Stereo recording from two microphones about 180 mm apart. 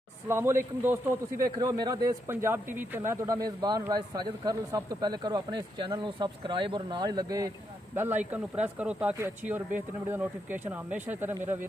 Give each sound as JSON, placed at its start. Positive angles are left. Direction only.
{"t": 0.3, "sound": "a man's voice", "side_deg": -15}